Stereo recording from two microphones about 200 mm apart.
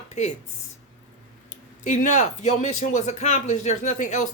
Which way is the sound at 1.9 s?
40° left (ahead or behind).